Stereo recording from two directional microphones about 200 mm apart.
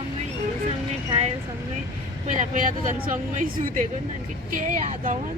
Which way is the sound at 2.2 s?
35° right (ahead or behind).